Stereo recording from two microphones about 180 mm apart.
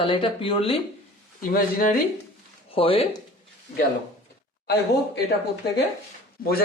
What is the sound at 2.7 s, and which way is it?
Speech, 30° left (ahead or behind).